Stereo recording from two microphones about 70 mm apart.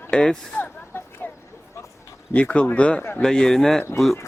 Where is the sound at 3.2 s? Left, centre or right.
Centre.